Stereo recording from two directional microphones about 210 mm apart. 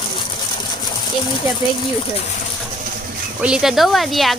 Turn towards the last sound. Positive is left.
turn(degrees=0)  # may be behind; listen again after turning